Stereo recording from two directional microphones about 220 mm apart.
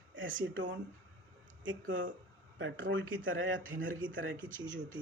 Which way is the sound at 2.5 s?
60° right (ahead or behind).